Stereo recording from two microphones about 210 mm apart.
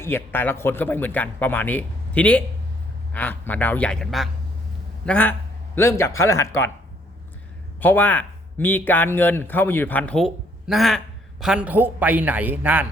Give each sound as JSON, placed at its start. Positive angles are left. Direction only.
{"t": 0.0, "sound": "speech", "side_deg": 10}
{"t": 7.8, "sound": "speech", "side_deg": 10}